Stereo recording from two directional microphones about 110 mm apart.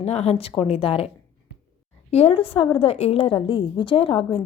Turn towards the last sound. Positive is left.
turn(degrees=50)  # may be behind; listen again after turning